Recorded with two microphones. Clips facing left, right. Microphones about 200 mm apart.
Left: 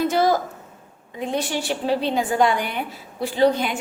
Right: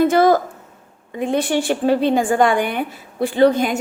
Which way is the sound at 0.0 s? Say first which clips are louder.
Right 6 dB; 55° right (ahead or behind).